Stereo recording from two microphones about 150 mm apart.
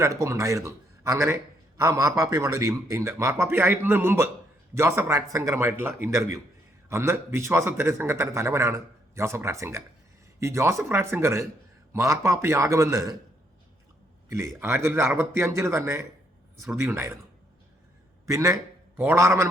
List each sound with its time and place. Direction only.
0.0 s a man's voice: 20° right (ahead or behind)
14.3 s a man's voice: 20° right (ahead or behind)
18.3 s a man's voice: 20° right (ahead or behind)